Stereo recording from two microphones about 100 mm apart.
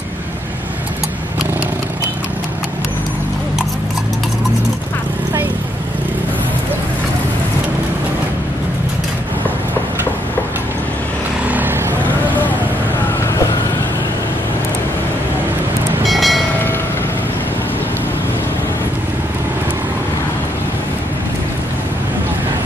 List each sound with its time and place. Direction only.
11.4 s vehicle: 15° right (ahead or behind)
16.1 s train: centre (ahead or behind)